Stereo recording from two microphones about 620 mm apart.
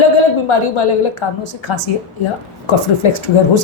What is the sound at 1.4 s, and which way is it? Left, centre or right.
A woman's voice, left.